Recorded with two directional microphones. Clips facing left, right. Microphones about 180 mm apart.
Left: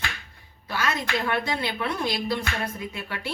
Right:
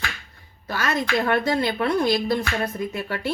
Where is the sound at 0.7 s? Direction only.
45° right (ahead or behind).